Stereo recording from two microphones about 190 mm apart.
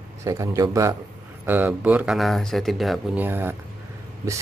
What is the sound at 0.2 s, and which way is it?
Speech, 15° right (ahead or behind).